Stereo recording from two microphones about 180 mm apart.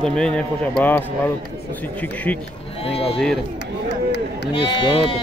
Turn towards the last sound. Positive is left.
turn(degrees=30)  # may be behind; listen again after turning